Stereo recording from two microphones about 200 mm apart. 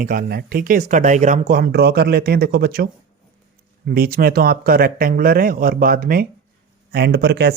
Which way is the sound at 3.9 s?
50° right (ahead or behind).